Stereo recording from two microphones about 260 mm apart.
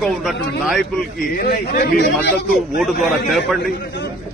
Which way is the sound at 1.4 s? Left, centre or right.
Left.